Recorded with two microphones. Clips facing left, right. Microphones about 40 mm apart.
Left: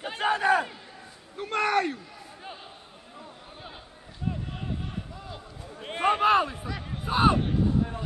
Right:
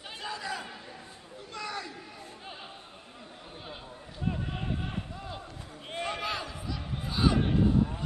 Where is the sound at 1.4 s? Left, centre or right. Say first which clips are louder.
Left 13 dB; left.